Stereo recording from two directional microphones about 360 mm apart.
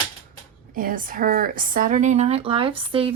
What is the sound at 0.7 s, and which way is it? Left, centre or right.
Speech, right.